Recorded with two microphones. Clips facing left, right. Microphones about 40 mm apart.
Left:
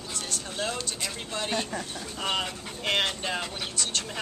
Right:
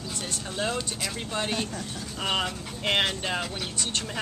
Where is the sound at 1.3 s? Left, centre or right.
Centre.